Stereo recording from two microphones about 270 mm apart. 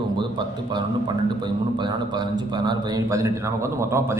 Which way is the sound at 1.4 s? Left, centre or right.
Centre.